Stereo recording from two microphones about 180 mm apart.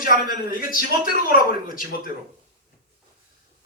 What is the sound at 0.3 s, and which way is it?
A man's voice, 50° left (ahead or behind).